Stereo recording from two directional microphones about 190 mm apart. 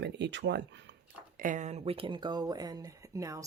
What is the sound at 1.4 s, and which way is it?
Speech, 40° right (ahead or behind).